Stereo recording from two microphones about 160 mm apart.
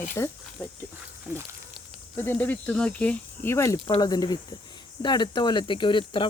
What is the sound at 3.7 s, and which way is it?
Speech, 30° left (ahead or behind).